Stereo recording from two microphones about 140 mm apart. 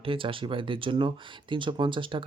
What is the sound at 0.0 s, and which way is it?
Speech, 40° right (ahead or behind).